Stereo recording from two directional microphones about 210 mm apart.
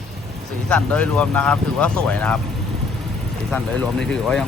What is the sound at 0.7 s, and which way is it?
Speech, 5° left (ahead or behind).